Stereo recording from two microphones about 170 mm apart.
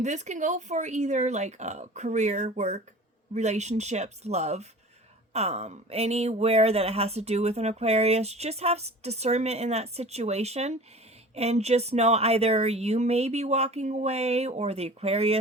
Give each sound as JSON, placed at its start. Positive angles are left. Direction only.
{"t": 0.0, "sound": "speech", "side_deg": -45}